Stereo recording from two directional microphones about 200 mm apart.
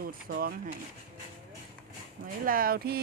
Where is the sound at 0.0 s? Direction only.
45° right (ahead or behind).